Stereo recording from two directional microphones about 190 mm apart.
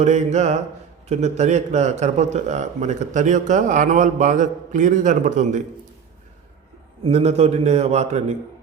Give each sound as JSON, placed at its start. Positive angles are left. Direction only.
{"t": 0.0, "sound": "a man's voice", "side_deg": -35}
{"t": 7.0, "sound": "a man's voice", "side_deg": -35}